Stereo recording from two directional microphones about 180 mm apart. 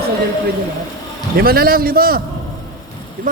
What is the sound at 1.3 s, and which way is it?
Speech, 60° right (ahead or behind).